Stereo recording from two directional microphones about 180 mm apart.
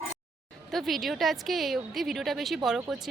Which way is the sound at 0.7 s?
Centre (ahead or behind).